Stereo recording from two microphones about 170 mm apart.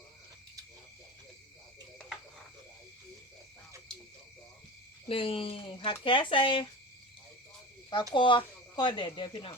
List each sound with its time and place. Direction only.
5.0 s speech: 30° left (ahead or behind)
8.1 s speech: 30° left (ahead or behind)